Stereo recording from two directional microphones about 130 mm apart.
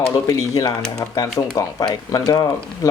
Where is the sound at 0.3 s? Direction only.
30° left (ahead or behind).